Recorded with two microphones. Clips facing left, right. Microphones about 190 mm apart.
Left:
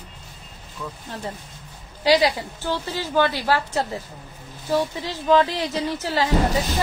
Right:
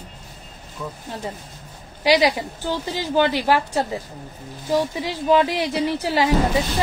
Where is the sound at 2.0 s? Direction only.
10° right (ahead or behind).